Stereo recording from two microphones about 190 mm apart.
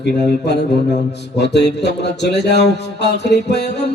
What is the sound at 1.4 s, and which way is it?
Speech, 60° left (ahead or behind).